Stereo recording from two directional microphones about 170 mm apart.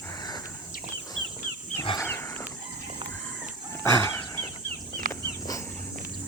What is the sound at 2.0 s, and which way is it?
Wild animals, 15° left (ahead or behind).